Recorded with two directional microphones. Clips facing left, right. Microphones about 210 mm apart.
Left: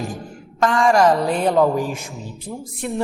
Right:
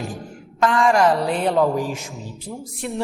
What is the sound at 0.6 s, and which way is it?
A woman's voice, 40° left (ahead or behind).